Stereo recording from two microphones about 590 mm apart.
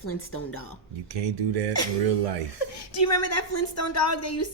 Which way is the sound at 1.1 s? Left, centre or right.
Right.